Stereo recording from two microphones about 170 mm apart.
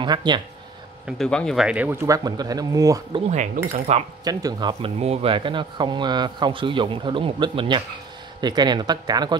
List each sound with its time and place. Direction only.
0.0 s a man's voice: 25° right (ahead or behind)
1.0 s speech: centre (ahead or behind); by 3.2 s 20° right (ahead or behind)
3.3 s speech: 50° right (ahead or behind)
4.2 s a man's voice: 20° right (ahead or behind)
5.0 s a man's voice: 35° right (ahead or behind)